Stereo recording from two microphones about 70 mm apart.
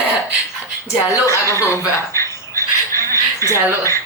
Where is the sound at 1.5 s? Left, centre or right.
Left.